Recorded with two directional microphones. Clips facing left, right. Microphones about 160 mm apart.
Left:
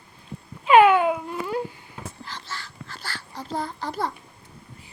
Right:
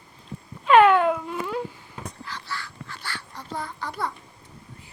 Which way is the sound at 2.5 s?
35° left (ahead or behind).